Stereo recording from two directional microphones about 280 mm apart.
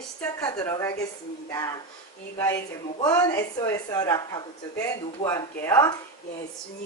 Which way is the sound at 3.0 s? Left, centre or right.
Centre.